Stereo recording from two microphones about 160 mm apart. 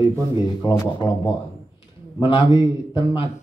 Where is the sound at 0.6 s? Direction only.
25° left (ahead or behind).